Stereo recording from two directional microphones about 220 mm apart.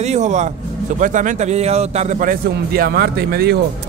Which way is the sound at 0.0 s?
30° right (ahead or behind).